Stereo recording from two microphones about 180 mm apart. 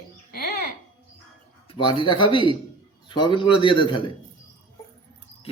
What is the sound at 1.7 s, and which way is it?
A man's voice, 25° left (ahead or behind).